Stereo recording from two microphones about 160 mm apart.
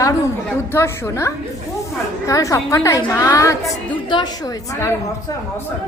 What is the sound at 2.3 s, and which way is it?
A woman's voice, 20° left (ahead or behind).